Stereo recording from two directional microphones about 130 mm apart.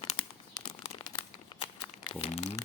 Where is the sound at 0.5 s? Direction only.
30° left (ahead or behind).